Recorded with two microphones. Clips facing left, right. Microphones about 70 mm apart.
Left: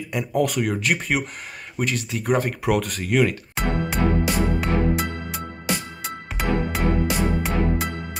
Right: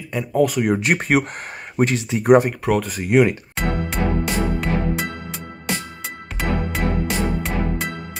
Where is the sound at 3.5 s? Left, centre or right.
Centre.